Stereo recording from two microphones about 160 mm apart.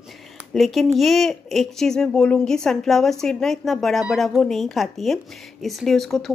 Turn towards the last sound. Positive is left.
turn(degrees=0)  # may be behind; listen again after turning